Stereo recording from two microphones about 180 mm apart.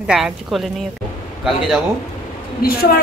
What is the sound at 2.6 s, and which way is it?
Speech, 55° left (ahead or behind).